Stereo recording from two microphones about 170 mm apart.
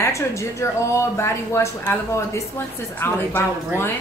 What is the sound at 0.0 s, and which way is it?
Speech, 15° left (ahead or behind).